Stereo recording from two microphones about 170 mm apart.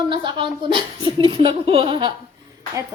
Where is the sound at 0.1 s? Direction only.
25° right (ahead or behind).